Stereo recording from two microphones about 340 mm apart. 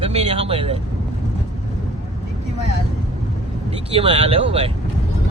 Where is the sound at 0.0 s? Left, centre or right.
Centre.